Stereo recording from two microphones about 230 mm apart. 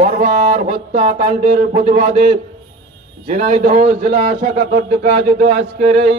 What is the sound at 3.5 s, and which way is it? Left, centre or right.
Speech, right.